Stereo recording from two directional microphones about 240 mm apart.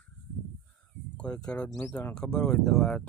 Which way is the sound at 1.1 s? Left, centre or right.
Centre.